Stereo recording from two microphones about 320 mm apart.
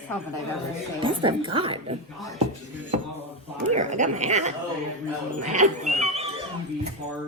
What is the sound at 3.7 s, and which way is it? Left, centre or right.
Speech, right.